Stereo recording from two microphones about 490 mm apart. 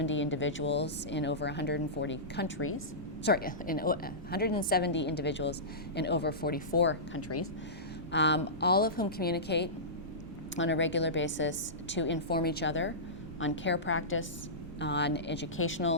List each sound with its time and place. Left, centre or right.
0.0 s speech: left